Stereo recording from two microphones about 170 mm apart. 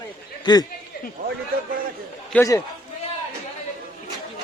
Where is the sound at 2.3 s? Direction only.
10° left (ahead or behind).